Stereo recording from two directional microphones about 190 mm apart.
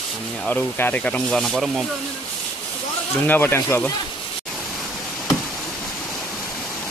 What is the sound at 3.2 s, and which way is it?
Speech, 10° left (ahead or behind).